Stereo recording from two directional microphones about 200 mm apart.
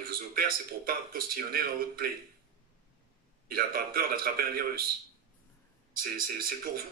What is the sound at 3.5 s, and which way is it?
A man's voice, 50° right (ahead or behind).